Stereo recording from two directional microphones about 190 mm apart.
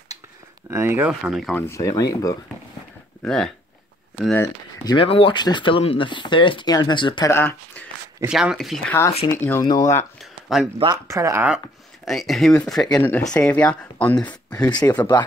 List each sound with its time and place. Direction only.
0.7 s speech: 10° right (ahead or behind)
1.7 s speech: 15° left (ahead or behind)
3.2 s speech: 5° left (ahead or behind)
4.8 s speech: 30° left (ahead or behind)
7.3 s speech: 10° left (ahead or behind)
8.3 s speech: 5° right (ahead or behind)
9.3 s speech: 10° left (ahead or behind)
10.2 s a sound: centre (ahead or behind)
10.8 s speech: 20° right (ahead or behind); by 14.7 s 5° left (ahead or behind)
14.7 s speech: 20° left (ahead or behind)